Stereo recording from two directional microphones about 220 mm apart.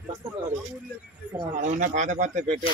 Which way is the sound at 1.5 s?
35° right (ahead or behind).